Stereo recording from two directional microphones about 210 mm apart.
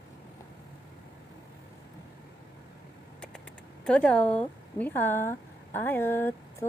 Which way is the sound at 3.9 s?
5° left (ahead or behind).